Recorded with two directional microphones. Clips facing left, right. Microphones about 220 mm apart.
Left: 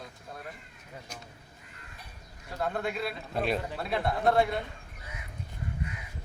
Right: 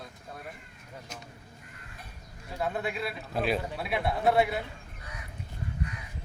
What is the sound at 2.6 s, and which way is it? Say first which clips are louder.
A man's voice: even; 5° right (ahead or behind).